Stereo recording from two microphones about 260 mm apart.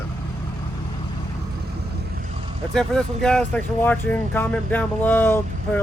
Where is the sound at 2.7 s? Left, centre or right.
Centre.